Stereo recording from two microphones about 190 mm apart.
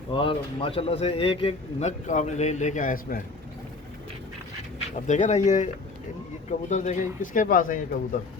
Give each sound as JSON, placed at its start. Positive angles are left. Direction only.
{"t": 0.1, "sound": "speech", "side_deg": 25}
{"t": 4.9, "sound": "speech", "side_deg": 40}